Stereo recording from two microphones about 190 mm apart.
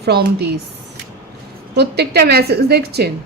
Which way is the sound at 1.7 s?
60° right (ahead or behind).